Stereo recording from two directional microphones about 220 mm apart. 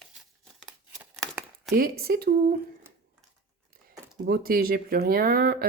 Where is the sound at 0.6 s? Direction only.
Centre (ahead or behind).